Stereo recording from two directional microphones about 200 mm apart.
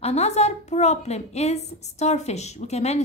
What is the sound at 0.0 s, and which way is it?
A woman's voice, 30° left (ahead or behind).